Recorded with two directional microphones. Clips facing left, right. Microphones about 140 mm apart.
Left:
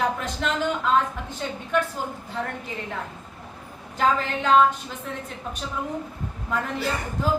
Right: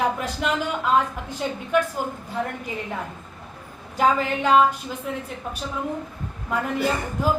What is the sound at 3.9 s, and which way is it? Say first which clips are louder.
A woman's voice: right 2 dB; 10° right (ahead or behind).